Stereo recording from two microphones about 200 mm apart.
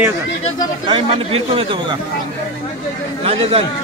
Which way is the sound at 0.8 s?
30° right (ahead or behind).